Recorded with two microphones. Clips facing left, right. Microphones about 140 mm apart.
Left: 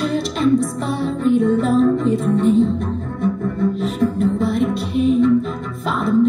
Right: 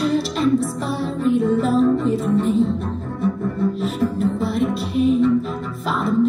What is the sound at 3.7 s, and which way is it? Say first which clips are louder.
Music: left 2 dB; centre (ahead or behind).